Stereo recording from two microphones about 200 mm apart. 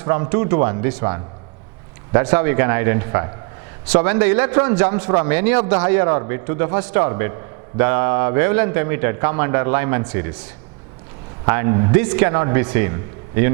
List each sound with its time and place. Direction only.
0.1 s a man's voice: 15° right (ahead or behind)
11.4 s a man's voice: 20° right (ahead or behind)